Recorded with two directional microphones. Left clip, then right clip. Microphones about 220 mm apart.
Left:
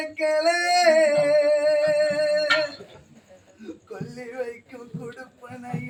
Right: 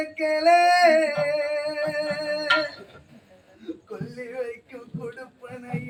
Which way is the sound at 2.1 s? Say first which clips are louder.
Left 3 dB; centre (ahead or behind).